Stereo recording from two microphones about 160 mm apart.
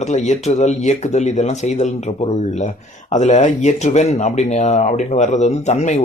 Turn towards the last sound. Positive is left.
turn(degrees=45)  # may be behind; listen again after turning